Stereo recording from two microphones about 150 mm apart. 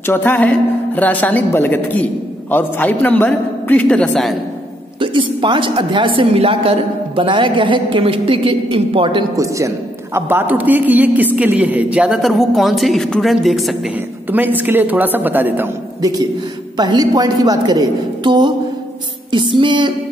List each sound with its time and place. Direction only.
0.0 s a woman's voice: 15° left (ahead or behind)
5.0 s a woman's voice: 30° right (ahead or behind)
10.1 s a woman's voice: 15° right (ahead or behind)
14.3 s speech: 10° right (ahead or behind)
16.0 s a woman's voice: 25° right (ahead or behind)